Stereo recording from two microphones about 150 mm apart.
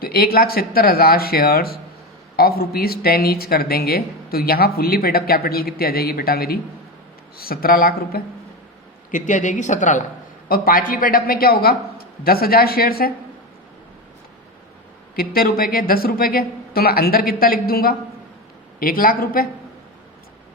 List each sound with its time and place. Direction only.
0.0 s speech: 90° left
9.1 s speech: 55° left (ahead or behind)
10.5 s speech: 70° left (ahead or behind)
15.1 s speech: 85° left
18.8 s speech: 70° left (ahead or behind)